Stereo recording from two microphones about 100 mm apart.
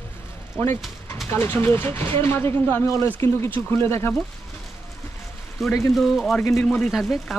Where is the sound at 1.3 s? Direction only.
25° left (ahead or behind).